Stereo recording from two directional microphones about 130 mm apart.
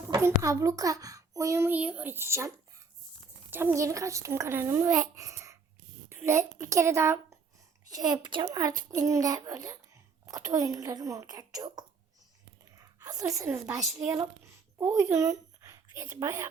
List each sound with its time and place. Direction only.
0.1 s a child's voice: 25° right (ahead or behind)
3.5 s a child's voice: 15° right (ahead or behind)
13.0 s a woman's voice: 25° right (ahead or behind)
14.8 s speech: 20° right (ahead or behind)